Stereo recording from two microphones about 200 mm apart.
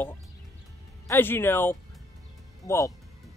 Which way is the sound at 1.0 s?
10° left (ahead or behind).